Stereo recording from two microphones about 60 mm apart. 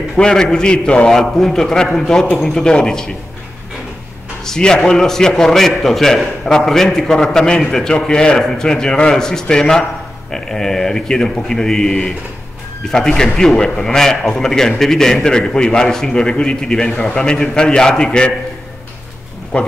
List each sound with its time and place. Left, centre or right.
0.1 s a man's voice: centre
4.5 s a man's voice: centre
19.5 s speech: centre